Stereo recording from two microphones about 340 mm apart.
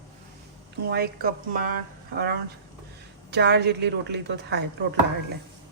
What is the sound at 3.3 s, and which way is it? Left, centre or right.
A woman's voice, right.